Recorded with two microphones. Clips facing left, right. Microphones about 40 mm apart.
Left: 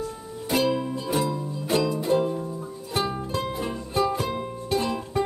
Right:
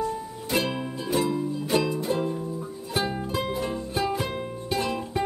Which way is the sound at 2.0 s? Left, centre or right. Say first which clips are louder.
Left 3 dB; centre.